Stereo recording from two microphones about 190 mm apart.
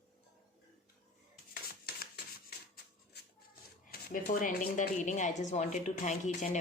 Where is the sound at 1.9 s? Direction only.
55° left (ahead or behind).